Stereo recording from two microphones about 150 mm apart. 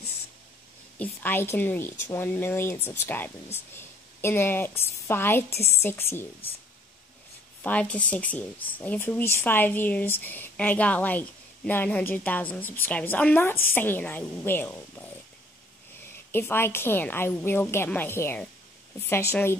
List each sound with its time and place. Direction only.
0.9 s a woman's voice: 10° left (ahead or behind)
7.6 s speech: 10° left (ahead or behind)
16.3 s speech: 15° left (ahead or behind)